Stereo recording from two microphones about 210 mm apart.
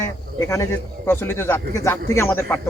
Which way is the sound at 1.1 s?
10° left (ahead or behind).